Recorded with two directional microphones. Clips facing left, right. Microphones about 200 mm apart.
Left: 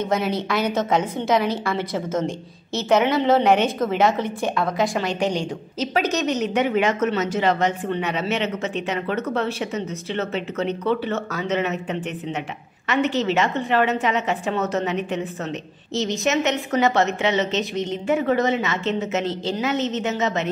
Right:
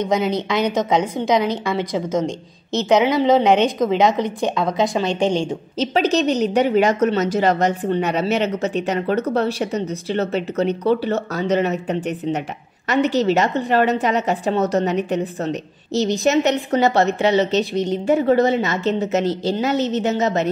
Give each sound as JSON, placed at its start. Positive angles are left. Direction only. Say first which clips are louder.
{"t": 0.1, "sound": "a woman's voice", "louder": "right 3 dB", "side_deg": -20}